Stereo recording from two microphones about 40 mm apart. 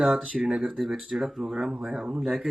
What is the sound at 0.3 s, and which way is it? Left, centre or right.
Speech, centre.